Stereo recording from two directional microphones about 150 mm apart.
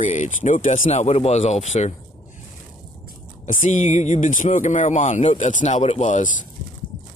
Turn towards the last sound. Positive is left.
turn(degrees=50)  # may be behind; listen again after turning